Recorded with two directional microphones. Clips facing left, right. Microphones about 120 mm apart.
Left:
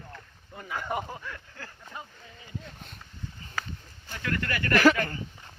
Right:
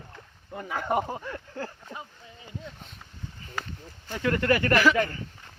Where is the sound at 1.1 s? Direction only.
30° right (ahead or behind).